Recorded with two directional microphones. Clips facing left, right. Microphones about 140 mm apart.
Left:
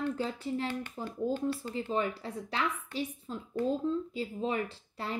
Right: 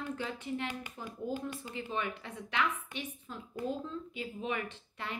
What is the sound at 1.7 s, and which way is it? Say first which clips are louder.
A woman's voice: left 5 dB; 35° left (ahead or behind).